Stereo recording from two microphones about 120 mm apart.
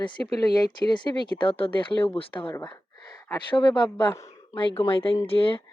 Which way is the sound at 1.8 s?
50° left (ahead or behind).